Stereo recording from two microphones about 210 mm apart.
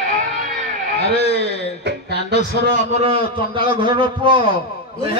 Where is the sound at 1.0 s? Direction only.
50° right (ahead or behind).